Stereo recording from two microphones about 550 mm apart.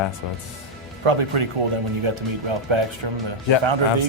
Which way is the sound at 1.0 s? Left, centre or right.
Right.